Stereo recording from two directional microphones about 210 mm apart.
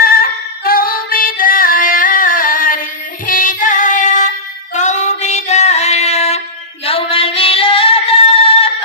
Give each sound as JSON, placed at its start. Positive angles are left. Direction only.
{"t": 0.0, "sound": "female singing", "side_deg": 45}
{"t": 3.3, "sound": "music", "side_deg": 40}
{"t": 4.7, "sound": "female singing", "side_deg": 35}